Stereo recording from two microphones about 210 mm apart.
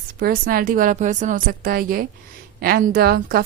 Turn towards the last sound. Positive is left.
turn(degrees=-45)  # may be behind; listen again after turning